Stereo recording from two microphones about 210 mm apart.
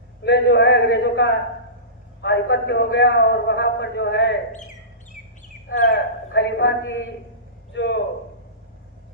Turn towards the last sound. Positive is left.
turn(degrees=55)  # may be behind; listen again after turning